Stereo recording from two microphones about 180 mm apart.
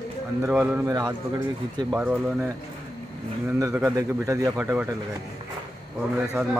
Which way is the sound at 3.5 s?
20° right (ahead or behind).